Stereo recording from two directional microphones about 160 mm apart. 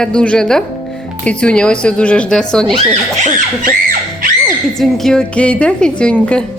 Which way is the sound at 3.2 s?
60° right (ahead or behind).